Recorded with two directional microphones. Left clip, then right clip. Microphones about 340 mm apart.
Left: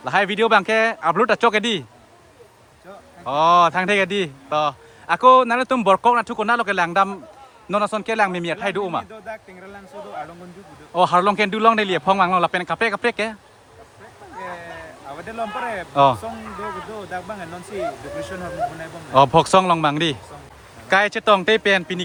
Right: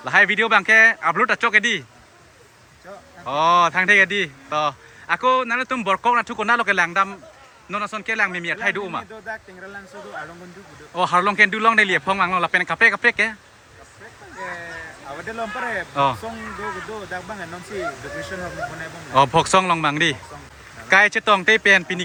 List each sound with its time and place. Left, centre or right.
0.0 s a man's voice: centre
3.2 s a man's voice: centre
10.9 s a man's voice: centre
14.3 s a sound: left
15.2 s speech: left
19.1 s a man's voice: centre